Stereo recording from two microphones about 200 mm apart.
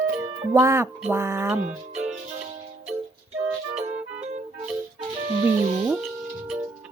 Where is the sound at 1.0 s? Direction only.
10° right (ahead or behind).